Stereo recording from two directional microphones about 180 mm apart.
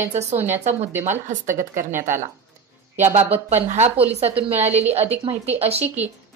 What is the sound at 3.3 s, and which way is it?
A woman's voice, 35° right (ahead or behind).